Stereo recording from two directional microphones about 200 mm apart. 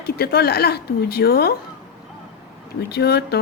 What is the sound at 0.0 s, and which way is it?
Speech, 50° left (ahead or behind).